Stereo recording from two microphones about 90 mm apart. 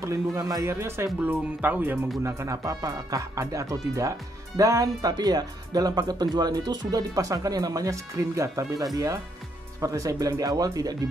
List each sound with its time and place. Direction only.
0.0 s speech: 35° right (ahead or behind)
0.7 s speech: 30° right (ahead or behind)
2.2 s speech: 30° right (ahead or behind)